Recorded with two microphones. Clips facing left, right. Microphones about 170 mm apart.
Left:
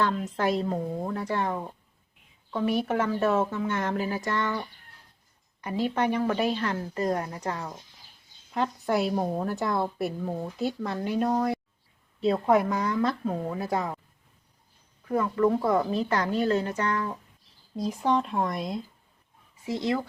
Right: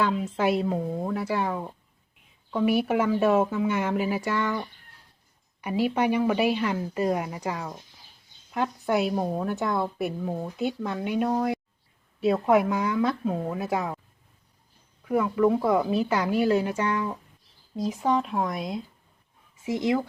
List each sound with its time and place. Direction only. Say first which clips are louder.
0.0 s speech: right 2 dB; 10° right (ahead or behind)
5.6 s a woman's voice: right 2 dB; 10° right (ahead or behind)
15.0 s a woman's voice: right 2 dB; 10° right (ahead or behind)
19.6 s speech: right 3 dB; 15° right (ahead or behind)